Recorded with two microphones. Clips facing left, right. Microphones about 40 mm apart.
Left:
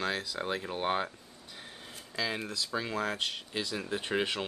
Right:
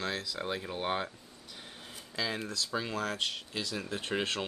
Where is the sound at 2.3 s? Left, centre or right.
Centre.